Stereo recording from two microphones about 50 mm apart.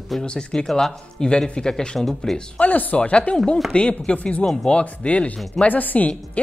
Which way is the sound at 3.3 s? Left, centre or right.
Centre.